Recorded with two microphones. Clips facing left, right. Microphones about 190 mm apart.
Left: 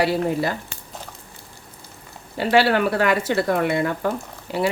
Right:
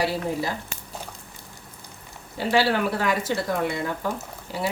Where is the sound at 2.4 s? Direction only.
60° left (ahead or behind).